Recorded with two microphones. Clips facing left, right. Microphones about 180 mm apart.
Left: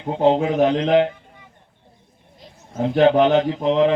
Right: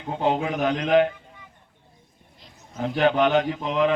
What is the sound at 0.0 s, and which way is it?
Mantra, 25° left (ahead or behind).